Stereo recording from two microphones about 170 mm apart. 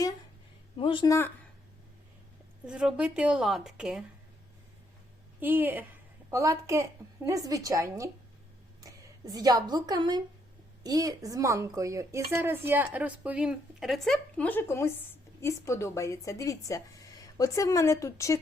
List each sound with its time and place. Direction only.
0.8 s speech: 30° left (ahead or behind)
1.0 s speech: 20° left (ahead or behind)
2.6 s a woman's voice: 5° right (ahead or behind)
5.4 s a woman's voice: 10° right (ahead or behind); by 18.3 s 20° left (ahead or behind)